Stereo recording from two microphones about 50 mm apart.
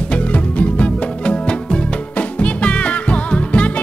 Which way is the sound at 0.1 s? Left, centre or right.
Left.